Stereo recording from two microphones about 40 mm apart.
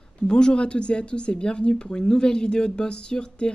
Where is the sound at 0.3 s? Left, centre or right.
Left.